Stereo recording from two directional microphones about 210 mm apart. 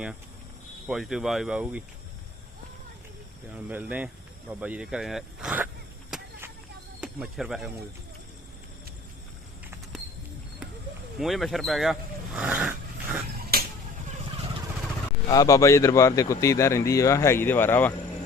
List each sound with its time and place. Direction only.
0.9 s speech: centre (ahead or behind)
3.5 s speech: 5° right (ahead or behind)
6.1 s vehicle: 5° right (ahead or behind)
7.0 s speech: 5° right (ahead or behind)
11.2 s speech: centre (ahead or behind)
13.3 s finger snapping: 45° right (ahead or behind)
15.3 s speech: 15° left (ahead or behind)